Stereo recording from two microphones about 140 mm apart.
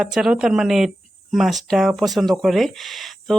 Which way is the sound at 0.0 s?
5° right (ahead or behind).